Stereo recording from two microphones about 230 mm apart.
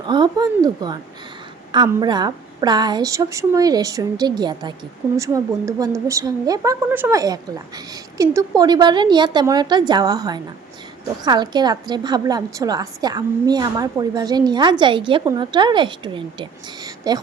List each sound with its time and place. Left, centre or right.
0.1 s a woman's voice: centre